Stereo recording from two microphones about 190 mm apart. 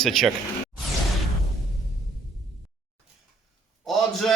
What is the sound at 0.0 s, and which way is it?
Speech, centre (ahead or behind).